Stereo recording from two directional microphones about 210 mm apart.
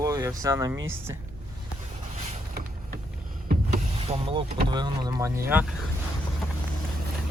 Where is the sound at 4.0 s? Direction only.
25° right (ahead or behind); by 5.7 s 10° right (ahead or behind).